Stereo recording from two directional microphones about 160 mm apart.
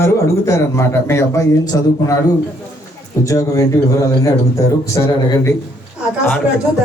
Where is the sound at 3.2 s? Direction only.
20° left (ahead or behind).